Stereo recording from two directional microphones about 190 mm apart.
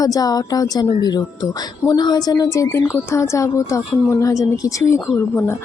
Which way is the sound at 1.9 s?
20° left (ahead or behind).